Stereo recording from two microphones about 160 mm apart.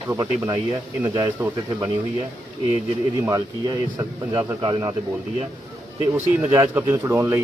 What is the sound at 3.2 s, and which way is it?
Speech, 20° right (ahead or behind).